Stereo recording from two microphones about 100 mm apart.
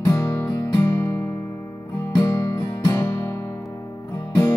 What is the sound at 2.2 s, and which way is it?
Music, 40° left (ahead or behind).